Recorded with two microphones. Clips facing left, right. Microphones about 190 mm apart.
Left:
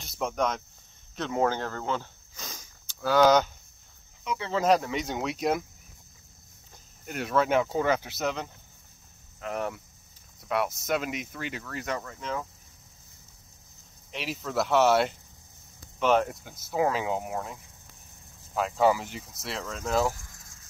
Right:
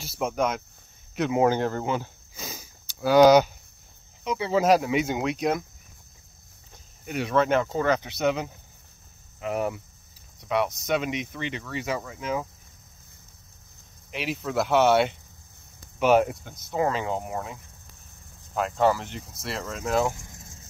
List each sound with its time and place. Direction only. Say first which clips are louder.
0.0 s speech: right 2 dB; 5° right (ahead or behind)
7.1 s speech: right 3 dB; centre (ahead or behind)
14.1 s speech: right 3 dB; centre (ahead or behind)
16.4 s speech: right 1 dB; 5° left (ahead or behind)
20.2 s vehicle: right 7 dB; 20° right (ahead or behind)